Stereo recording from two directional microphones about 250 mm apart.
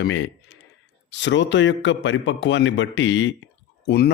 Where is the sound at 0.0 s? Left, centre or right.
Left.